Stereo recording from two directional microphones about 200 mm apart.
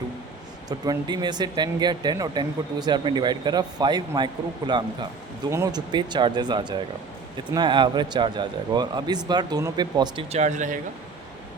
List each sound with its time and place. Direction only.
0.7 s speech: 20° right (ahead or behind); by 10.8 s 40° right (ahead or behind)